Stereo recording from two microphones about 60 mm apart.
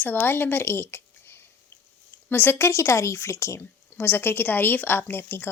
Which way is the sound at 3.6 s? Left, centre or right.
Left.